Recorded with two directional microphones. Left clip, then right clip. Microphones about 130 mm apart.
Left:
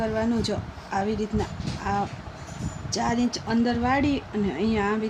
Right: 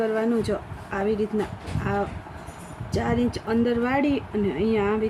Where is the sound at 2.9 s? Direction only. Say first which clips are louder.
Right 1 dB; 55° left (ahead or behind).